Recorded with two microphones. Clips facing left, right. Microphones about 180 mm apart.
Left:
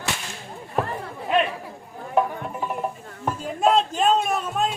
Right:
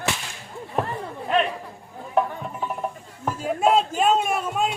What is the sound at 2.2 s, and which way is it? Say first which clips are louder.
Music: left 1 dB; centre (ahead or behind).